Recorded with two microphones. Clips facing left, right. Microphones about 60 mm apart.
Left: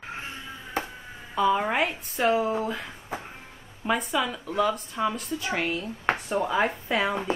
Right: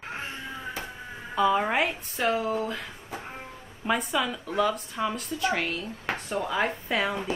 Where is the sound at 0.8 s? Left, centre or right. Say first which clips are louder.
Left 6 dB; left.